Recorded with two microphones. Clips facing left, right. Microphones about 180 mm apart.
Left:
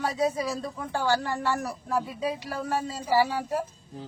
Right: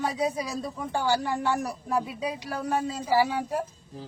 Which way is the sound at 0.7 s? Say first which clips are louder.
Right 1 dB; 15° right (ahead or behind).